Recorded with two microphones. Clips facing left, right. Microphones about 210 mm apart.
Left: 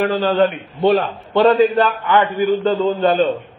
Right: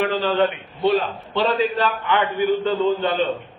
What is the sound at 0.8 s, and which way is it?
A man's voice, 55° left (ahead or behind).